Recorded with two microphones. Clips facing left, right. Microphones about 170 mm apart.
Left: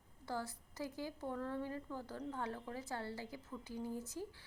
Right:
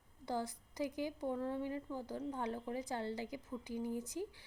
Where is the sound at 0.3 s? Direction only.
15° right (ahead or behind).